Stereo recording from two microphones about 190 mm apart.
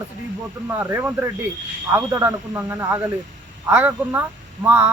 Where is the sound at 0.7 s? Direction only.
10° right (ahead or behind).